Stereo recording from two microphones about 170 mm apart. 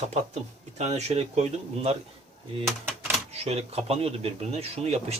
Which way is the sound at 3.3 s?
40° right (ahead or behind).